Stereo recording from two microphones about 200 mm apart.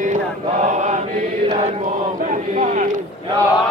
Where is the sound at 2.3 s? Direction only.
40° right (ahead or behind).